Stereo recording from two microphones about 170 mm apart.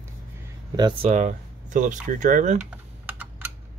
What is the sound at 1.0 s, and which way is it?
Speech, 45° right (ahead or behind).